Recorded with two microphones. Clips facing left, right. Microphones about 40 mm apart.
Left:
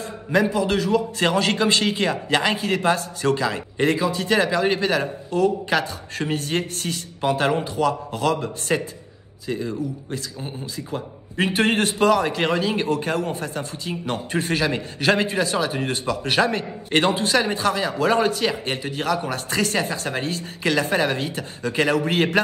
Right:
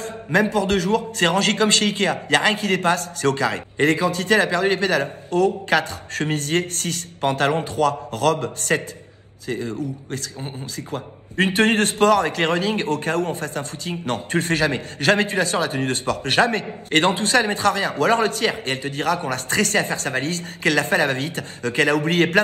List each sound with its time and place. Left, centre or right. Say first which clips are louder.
0.3 s a man's voice: right 1 dB; right
8.7 s a man's voice: right 1 dB; centre
9.5 s a man's voice: even; right